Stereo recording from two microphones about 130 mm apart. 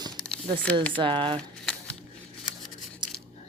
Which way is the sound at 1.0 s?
40° right (ahead or behind).